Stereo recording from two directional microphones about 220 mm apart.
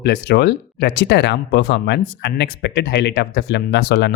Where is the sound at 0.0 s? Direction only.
50° left (ahead or behind).